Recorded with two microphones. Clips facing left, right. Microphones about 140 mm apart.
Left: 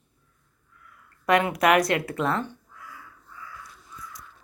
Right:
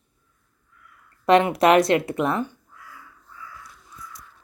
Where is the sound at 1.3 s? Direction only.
25° right (ahead or behind).